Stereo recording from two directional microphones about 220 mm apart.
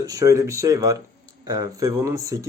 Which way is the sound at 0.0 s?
15° right (ahead or behind).